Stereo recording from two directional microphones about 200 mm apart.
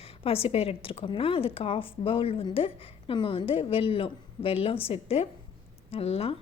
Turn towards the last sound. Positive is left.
turn(degrees=30)  # may be behind; listen again after turning